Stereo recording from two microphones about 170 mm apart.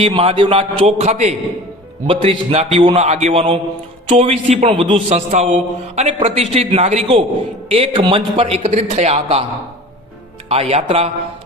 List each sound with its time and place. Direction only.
0.0 s a man's voice: 35° right (ahead or behind)
10.5 s a man's voice: 35° right (ahead or behind)